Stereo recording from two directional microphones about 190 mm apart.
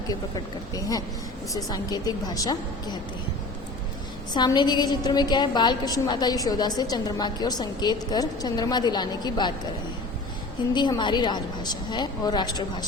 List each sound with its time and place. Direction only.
0.1 s a woman's voice: 20° left (ahead or behind)
4.4 s a woman's voice: 20° left (ahead or behind)
10.8 s a woman's voice: 25° left (ahead or behind)